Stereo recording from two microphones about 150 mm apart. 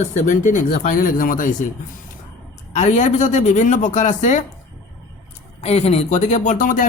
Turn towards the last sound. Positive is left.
turn(degrees=60)  # may be behind; listen again after turning